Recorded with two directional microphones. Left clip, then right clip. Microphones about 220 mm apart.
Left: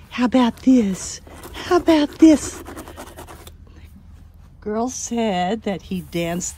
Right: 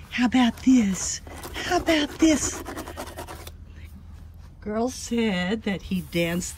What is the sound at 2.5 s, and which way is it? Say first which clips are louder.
Scratch: right 1 dB; 15° left (ahead or behind).